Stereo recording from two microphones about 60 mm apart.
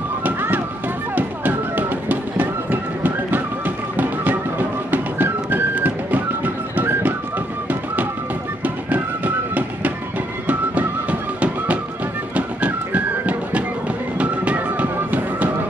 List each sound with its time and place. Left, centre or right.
0.2 s run: right
1.1 s music: right
8.6 s music: right